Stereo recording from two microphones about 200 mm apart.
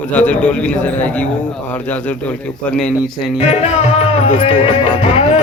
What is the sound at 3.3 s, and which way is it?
Music, 30° left (ahead or behind).